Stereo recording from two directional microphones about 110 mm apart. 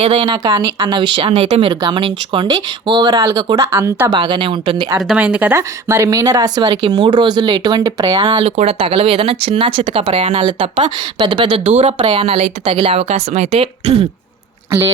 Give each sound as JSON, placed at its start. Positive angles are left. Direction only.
{"t": 0.4, "sound": "speech", "side_deg": -35}
{"t": 4.1, "sound": "speech", "side_deg": -50}
{"t": 5.0, "sound": "speech", "side_deg": -10}
{"t": 5.5, "sound": "speech", "side_deg": -25}
{"t": 8.4, "sound": "speech", "side_deg": -65}
{"t": 10.8, "sound": "speech", "side_deg": -45}
{"t": 11.6, "sound": "speech", "side_deg": -90}
{"t": 12.1, "sound": "a woman's voice", "side_deg": -65}